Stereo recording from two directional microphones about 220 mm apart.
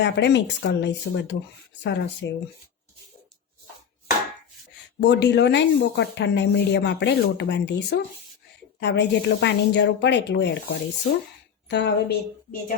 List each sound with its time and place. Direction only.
0.0 s a woman's voice: 50° left (ahead or behind)
4.9 s a woman's voice: 50° left (ahead or behind)